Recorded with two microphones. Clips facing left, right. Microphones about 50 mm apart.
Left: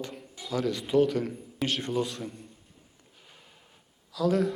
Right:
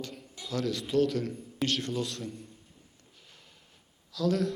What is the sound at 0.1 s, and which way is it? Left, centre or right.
A man's voice, centre.